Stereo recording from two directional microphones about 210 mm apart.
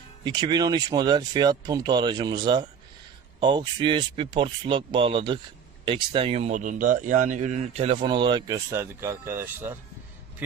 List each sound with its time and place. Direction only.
0.3 s a man's voice: 20° right (ahead or behind)